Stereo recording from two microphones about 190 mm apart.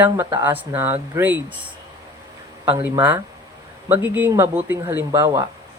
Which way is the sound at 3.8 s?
10° right (ahead or behind).